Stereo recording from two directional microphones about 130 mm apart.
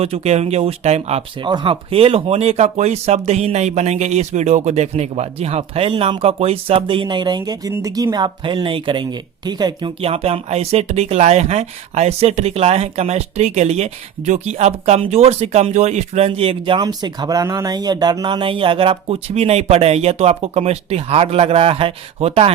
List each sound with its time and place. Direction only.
0.0 s speech: 55° right (ahead or behind)
1.5 s speech: 40° right (ahead or behind)
10.0 s speech: 50° right (ahead or behind)